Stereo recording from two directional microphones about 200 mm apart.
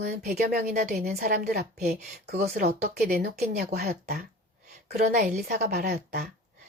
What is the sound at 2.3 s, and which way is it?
A woman's voice, 40° right (ahead or behind).